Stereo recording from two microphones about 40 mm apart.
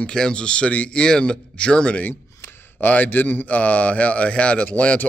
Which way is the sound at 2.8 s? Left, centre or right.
Left.